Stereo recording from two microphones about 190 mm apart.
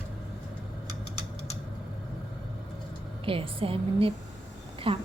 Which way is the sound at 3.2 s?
30° right (ahead or behind).